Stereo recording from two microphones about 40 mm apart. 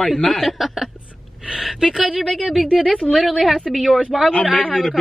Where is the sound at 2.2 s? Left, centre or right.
Centre.